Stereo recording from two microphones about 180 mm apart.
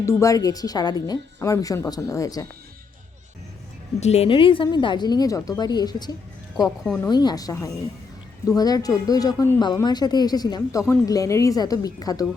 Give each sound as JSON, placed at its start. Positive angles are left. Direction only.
{"t": 0.0, "sound": "a woman's voice", "side_deg": 15}
{"t": 4.0, "sound": "a woman's voice", "side_deg": 35}
{"t": 6.8, "sound": "speech", "side_deg": 5}
{"t": 7.1, "sound": "a woman's voice", "side_deg": 25}